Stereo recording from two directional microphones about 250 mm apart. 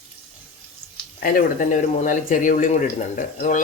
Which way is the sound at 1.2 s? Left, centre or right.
Left.